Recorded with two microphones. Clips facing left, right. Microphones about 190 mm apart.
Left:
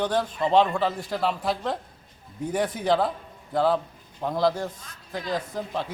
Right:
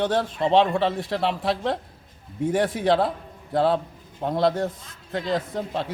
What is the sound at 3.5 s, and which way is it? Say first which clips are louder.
A man's voice: right 2 dB; 30° right (ahead or behind).